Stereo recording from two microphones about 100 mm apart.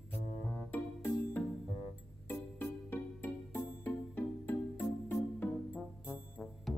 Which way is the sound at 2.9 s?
20° left (ahead or behind).